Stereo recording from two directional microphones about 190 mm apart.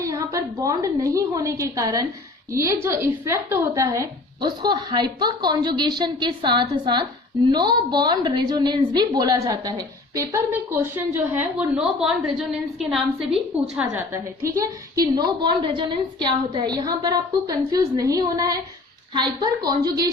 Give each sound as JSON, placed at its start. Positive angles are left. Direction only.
{"t": 0.0, "sound": "a woman's voice", "side_deg": -15}
{"t": 13.8, "sound": "a woman's voice", "side_deg": -15}